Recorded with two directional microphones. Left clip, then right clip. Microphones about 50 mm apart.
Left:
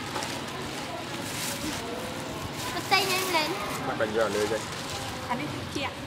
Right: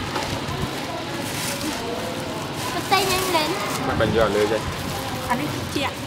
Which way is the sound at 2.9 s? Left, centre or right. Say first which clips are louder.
Right 5 dB; centre.